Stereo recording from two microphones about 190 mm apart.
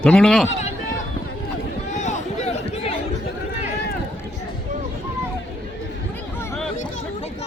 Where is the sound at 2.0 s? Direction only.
40° left (ahead or behind).